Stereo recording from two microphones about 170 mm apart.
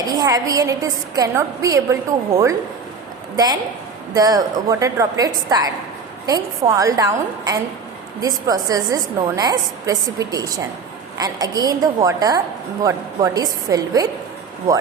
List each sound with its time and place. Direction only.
0.1 s a woman's voice: 20° right (ahead or behind)